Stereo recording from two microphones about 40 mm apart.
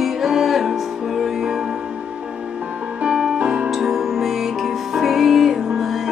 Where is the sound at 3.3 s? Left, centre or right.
Right.